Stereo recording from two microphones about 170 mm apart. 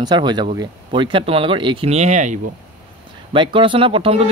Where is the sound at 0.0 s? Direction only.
25° right (ahead or behind); by 2.4 s 45° right (ahead or behind).